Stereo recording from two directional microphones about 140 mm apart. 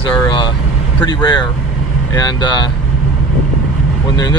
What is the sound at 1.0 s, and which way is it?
Speech, 35° left (ahead or behind).